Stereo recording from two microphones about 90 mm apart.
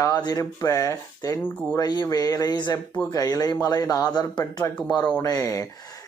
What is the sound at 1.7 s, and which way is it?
Speech, 50° left (ahead or behind).